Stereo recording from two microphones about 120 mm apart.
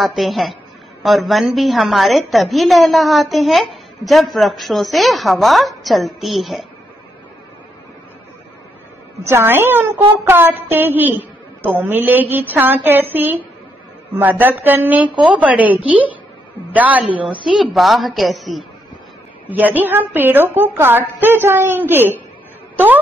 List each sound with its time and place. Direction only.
0.0 s a woman's voice: centre (ahead or behind)
9.2 s a woman's voice: 20° right (ahead or behind)
17.5 s a woman's voice: centre (ahead or behind)
19.5 s a woman's voice: 15° right (ahead or behind)